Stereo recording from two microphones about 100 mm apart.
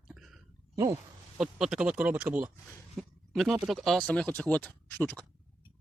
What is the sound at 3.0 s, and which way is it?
Speech, centre (ahead or behind).